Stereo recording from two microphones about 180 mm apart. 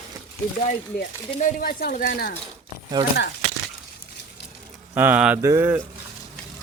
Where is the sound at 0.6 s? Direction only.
50° left (ahead or behind).